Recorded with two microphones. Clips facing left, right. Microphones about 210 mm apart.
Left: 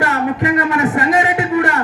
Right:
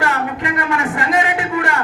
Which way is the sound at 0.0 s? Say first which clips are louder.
Left 4 dB; 25° left (ahead or behind).